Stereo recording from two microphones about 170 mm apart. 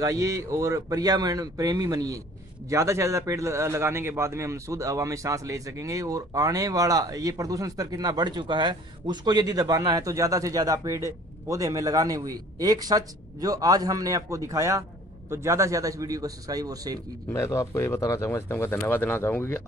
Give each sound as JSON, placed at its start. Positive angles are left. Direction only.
{"t": 0.0, "sound": "a man's voice", "side_deg": -20}
{"t": 17.3, "sound": "speech", "side_deg": 15}